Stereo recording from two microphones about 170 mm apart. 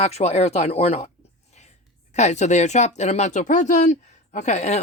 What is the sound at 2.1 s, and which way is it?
Speech, 40° left (ahead or behind).